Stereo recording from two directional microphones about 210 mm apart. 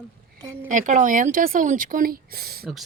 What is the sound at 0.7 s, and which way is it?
Speech, 35° right (ahead or behind).